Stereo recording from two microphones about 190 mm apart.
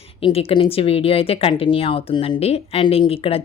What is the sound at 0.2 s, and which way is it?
Speech, 30° left (ahead or behind).